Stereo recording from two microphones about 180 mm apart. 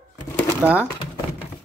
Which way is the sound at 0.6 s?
10° right (ahead or behind).